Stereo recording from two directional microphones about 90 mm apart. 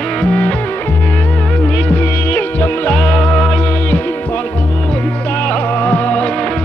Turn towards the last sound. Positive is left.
turn(degrees=10)  # may be behind; listen again after turning